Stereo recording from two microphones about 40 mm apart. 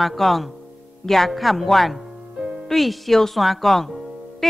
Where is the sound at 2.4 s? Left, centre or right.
Right.